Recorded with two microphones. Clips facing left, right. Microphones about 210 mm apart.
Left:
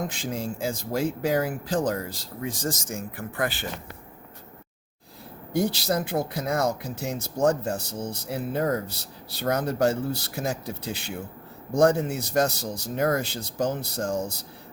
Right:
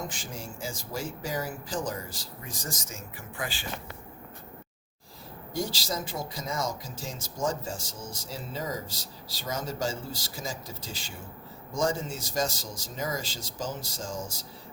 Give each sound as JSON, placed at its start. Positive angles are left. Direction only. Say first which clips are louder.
{"t": 0.1, "sound": "speech", "louder": "left 9 dB", "side_deg": 60}
{"t": 3.2, "sound": "speech", "louder": "left 7 dB", "side_deg": 55}
{"t": 5.5, "sound": "speech", "louder": "left 8 dB", "side_deg": 60}